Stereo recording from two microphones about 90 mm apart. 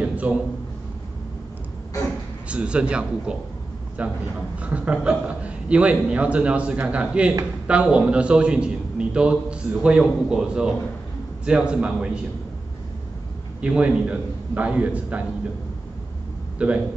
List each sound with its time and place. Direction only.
0.0 s a sound: 15° right (ahead or behind)
2.4 s a man's voice: 10° right (ahead or behind)
13.6 s a man's voice: 10° right (ahead or behind)
16.5 s a man's voice: 15° right (ahead or behind)